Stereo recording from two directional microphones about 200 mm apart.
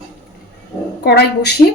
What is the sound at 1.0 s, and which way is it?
Speech, 55° left (ahead or behind).